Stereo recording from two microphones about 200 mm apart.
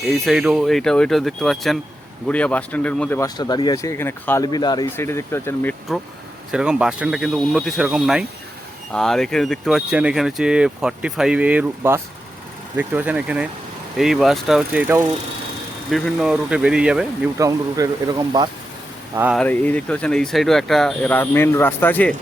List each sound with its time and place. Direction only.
0.1 s speech: centre (ahead or behind)
6.5 s speech: 5° right (ahead or behind)
17.3 s speech: 15° right (ahead or behind)
19.4 s speech: 5° left (ahead or behind)